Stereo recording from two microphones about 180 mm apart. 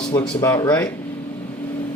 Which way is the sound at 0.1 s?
20° left (ahead or behind).